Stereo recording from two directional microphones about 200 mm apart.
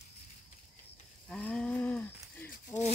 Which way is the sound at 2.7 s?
15° left (ahead or behind).